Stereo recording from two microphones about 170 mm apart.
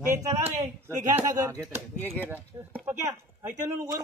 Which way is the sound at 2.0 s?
10° left (ahead or behind).